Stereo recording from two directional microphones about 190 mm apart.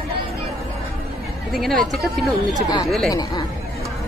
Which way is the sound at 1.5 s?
Centre (ahead or behind).